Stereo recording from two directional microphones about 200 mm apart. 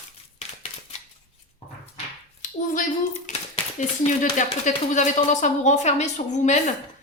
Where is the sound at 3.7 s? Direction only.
40° left (ahead or behind).